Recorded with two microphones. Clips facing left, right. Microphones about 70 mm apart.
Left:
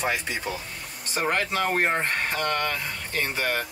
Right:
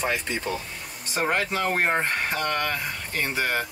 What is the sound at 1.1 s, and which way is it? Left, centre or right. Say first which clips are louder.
Speech: even; centre.